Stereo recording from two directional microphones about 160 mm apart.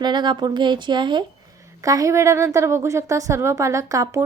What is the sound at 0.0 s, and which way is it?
A woman's voice, 30° right (ahead or behind).